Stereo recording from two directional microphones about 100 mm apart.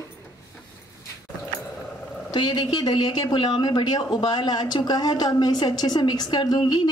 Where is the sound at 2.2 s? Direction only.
50° left (ahead or behind).